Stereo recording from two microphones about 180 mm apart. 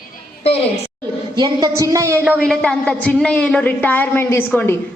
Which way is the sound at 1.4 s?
20° right (ahead or behind).